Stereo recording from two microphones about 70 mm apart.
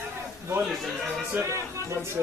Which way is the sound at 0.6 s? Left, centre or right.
Centre.